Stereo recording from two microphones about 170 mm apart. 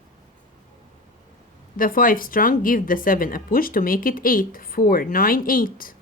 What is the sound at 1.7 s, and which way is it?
Speech, 55° left (ahead or behind).